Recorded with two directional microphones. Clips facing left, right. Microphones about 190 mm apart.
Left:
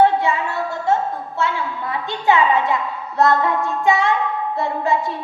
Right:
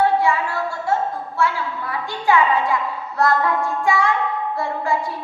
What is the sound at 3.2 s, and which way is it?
A woman's voice, 20° left (ahead or behind).